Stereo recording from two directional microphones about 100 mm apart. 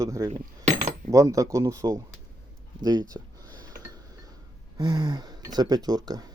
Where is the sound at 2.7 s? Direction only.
45° right (ahead or behind).